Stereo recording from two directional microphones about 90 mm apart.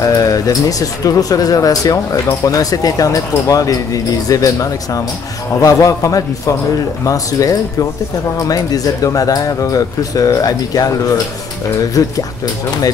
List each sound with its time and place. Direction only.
0.0 s speech: 40° left (ahead or behind)